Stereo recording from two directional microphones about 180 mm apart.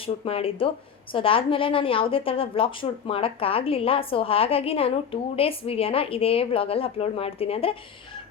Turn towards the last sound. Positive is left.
turn(degrees=35)  # may be behind; listen again after turning